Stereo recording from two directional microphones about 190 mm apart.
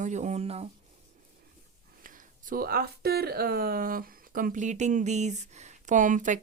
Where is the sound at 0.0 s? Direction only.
40° right (ahead or behind).